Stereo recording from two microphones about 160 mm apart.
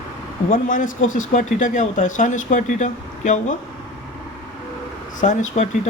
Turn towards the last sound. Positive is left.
turn(degrees=50)  # may be behind; listen again after turning